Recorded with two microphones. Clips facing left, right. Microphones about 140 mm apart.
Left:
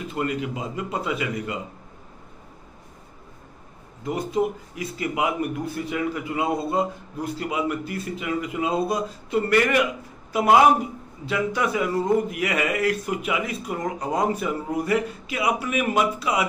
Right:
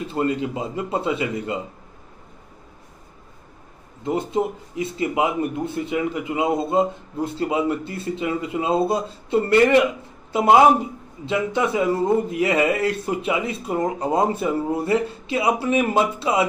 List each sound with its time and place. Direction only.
0.1 s speech: 30° right (ahead or behind)
4.0 s speech: 25° right (ahead or behind)